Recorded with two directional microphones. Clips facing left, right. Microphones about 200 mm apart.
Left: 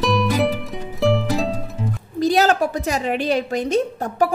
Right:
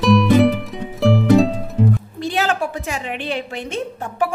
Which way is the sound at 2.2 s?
40° left (ahead or behind).